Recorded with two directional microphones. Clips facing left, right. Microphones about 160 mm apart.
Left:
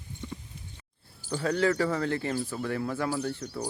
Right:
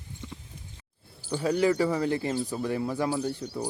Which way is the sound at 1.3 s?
10° right (ahead or behind).